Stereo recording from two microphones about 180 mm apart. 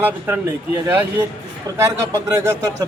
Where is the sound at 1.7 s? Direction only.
15° right (ahead or behind).